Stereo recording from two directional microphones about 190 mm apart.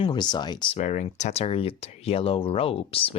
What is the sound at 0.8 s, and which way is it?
Speech, 40° left (ahead or behind).